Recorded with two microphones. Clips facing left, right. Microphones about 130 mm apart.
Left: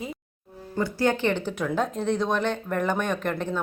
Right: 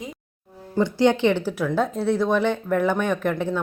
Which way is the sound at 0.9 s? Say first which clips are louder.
Right 5 dB; 20° right (ahead or behind).